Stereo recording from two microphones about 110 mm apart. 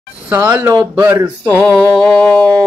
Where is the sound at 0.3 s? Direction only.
20° right (ahead or behind).